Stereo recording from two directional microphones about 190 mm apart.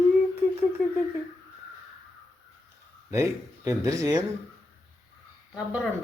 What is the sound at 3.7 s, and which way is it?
Speech, 15° right (ahead or behind).